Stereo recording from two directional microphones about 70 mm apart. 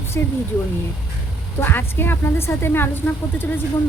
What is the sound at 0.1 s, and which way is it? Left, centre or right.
Speech, left.